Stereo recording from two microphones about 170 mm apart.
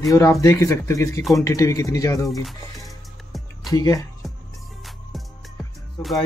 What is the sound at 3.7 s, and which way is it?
Speech, 20° left (ahead or behind).